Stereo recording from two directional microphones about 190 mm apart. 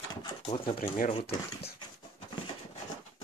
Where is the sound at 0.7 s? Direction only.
45° left (ahead or behind).